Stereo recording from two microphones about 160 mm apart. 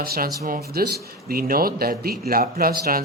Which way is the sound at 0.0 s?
65° right (ahead or behind).